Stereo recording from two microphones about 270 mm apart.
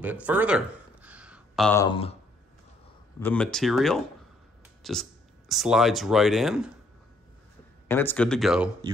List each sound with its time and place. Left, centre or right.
0.0 s a sound: centre
1.8 s speech: centre
3.2 s speech: centre
7.9 s speech: centre